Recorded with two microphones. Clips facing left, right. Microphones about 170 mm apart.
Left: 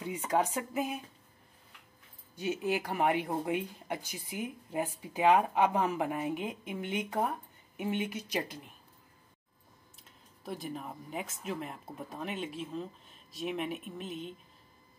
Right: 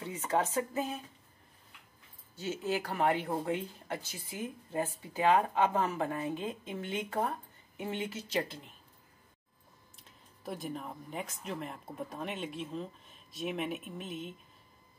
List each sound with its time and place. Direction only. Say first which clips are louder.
0.0 s speech: left 1 dB; 10° left (ahead or behind)
2.3 s speech: left 2 dB; 15° left (ahead or behind)
9.9 s speech: even; centre (ahead or behind)